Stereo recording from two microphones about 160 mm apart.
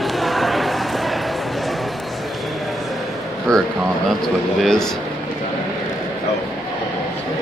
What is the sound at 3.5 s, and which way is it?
Speech, 5° left (ahead or behind).